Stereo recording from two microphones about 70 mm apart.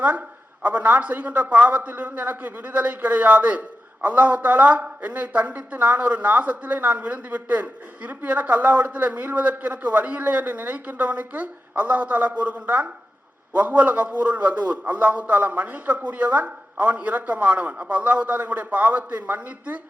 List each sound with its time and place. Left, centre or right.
0.0 s speech: right